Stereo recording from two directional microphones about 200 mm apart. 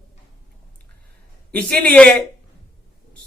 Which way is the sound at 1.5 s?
5° left (ahead or behind).